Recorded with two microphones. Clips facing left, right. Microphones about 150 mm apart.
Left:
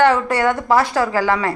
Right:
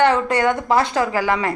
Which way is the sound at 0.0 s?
20° right (ahead or behind).